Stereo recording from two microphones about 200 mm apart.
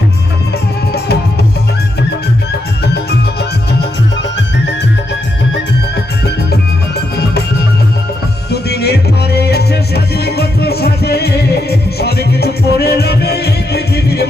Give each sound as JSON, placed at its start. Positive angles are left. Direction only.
{"t": 2.8, "sound": "music", "side_deg": 55}
{"t": 8.4, "sound": "music", "side_deg": 55}